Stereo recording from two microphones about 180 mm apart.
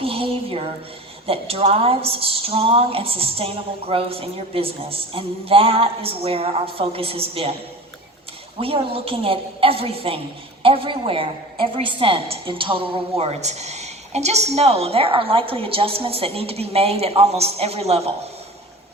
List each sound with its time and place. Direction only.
0.0 s a sound: 30° right (ahead or behind)
1.3 s a woman's voice: 30° right (ahead or behind)
8.5 s a woman's voice: 30° right (ahead or behind)